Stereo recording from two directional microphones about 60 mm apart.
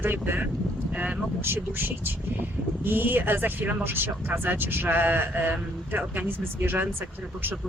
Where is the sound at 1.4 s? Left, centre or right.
Right.